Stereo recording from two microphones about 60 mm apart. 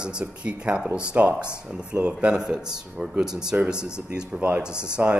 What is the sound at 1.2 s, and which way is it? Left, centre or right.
A man's voice, right.